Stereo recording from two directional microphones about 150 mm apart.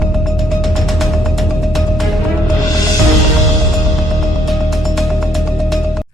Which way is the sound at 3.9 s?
Centre (ahead or behind).